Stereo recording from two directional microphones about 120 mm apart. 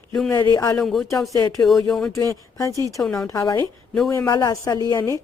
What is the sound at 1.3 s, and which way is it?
Speech, 30° left (ahead or behind).